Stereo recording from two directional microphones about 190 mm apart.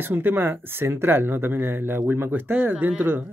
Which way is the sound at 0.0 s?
10° right (ahead or behind).